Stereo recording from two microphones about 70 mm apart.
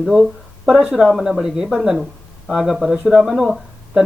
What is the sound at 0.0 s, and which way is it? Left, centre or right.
Speech, centre.